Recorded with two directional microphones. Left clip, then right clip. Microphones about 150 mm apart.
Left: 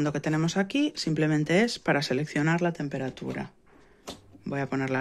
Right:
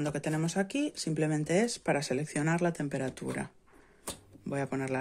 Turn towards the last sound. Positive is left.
turn(degrees=-10)  # may be behind; listen again after turning